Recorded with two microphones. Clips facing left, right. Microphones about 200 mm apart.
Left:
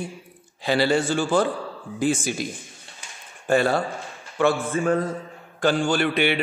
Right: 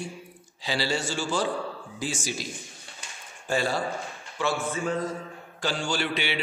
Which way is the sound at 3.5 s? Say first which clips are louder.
Left 6 dB; 60° left (ahead or behind).